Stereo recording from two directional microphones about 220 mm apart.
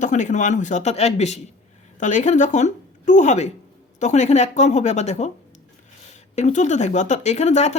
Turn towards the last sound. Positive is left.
turn(degrees=30)  # may be behind; listen again after turning